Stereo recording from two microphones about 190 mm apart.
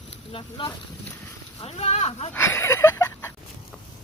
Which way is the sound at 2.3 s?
10° left (ahead or behind).